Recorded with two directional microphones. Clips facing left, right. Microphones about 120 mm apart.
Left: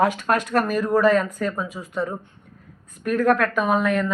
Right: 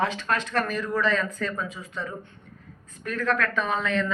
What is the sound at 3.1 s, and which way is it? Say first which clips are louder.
Speech: left 7 dB; 55° left (ahead or behind).